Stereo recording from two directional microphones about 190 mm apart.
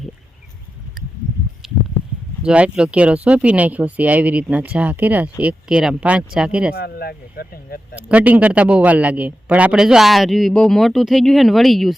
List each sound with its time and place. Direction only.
1.6 s a sound: centre (ahead or behind)
2.4 s a man's voice: 5° right (ahead or behind)
6.7 s speech: 55° left (ahead or behind)
7.9 s a man's voice: 5° right (ahead or behind)